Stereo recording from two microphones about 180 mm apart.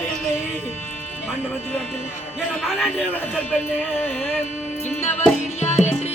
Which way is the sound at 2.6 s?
5° left (ahead or behind).